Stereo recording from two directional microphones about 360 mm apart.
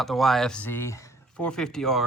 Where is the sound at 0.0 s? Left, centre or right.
Centre.